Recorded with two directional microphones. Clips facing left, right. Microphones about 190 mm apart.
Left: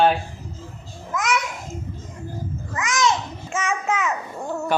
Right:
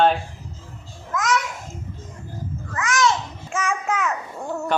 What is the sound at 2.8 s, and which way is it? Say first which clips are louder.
Babbling: right 1 dB; 20° left (ahead or behind).